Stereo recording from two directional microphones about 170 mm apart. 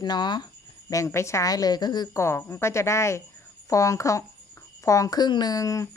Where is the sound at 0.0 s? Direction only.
25° left (ahead or behind).